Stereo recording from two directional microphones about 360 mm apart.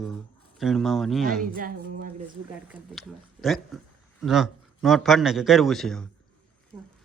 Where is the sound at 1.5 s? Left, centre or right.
Right.